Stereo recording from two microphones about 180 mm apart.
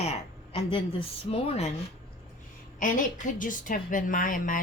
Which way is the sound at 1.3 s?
35° left (ahead or behind).